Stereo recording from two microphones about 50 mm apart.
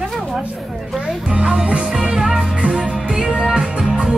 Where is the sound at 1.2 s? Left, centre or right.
Centre.